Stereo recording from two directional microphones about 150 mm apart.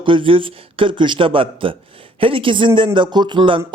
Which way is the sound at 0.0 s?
35° right (ahead or behind).